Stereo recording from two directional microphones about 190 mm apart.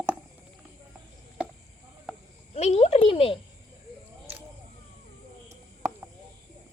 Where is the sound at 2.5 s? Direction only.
35° left (ahead or behind).